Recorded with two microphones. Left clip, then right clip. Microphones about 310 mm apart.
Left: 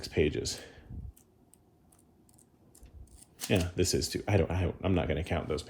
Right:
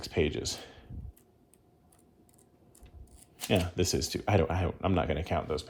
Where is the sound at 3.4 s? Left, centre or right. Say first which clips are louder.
Right 1 dB; centre.